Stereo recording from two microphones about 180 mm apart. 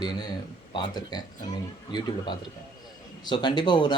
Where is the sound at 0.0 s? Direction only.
25° left (ahead or behind).